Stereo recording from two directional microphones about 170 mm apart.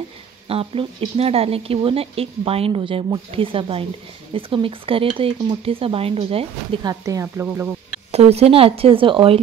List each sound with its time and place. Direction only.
0.5 s speech: 35° right (ahead or behind)
6.9 s speech: 20° right (ahead or behind)
8.1 s speech: 40° right (ahead or behind)